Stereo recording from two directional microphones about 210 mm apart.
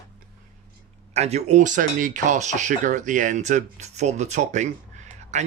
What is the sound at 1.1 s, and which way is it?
Speech, 30° right (ahead or behind).